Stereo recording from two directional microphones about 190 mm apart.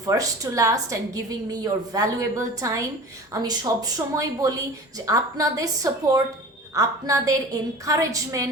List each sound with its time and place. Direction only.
0.0 s a woman's voice: 15° right (ahead or behind)